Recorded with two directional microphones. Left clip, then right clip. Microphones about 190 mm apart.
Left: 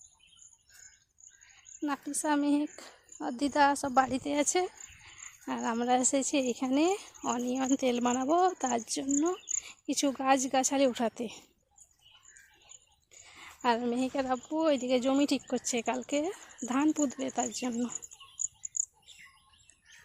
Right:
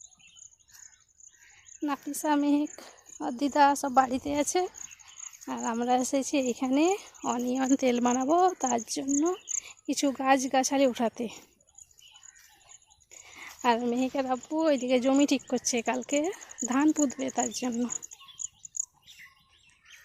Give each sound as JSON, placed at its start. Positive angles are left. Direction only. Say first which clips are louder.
{"t": 1.8, "sound": "speech", "louder": "right 2 dB", "side_deg": -15}
{"t": 5.1, "sound": "chicken", "louder": "even", "side_deg": 5}
{"t": 5.5, "sound": "a woman's voice", "louder": "right 2 dB", "side_deg": -10}
{"t": 13.1, "sound": "speech", "louder": "right 5 dB", "side_deg": -15}
{"t": 18.4, "sound": "bird", "louder": "left 3 dB", "side_deg": -25}